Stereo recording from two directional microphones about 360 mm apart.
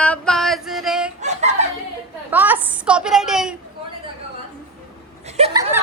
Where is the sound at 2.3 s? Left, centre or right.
Centre.